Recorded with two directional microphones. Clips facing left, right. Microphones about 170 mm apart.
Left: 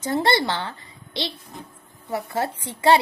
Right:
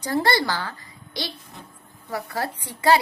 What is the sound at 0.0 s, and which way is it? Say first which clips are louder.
A woman's voice: left 1 dB; 25° left (ahead or behind).